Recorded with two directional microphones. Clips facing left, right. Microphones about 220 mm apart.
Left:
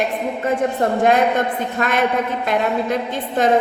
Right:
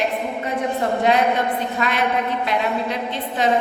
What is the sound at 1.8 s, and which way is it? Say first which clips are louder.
A woman's voice: left 4 dB; 50° left (ahead or behind).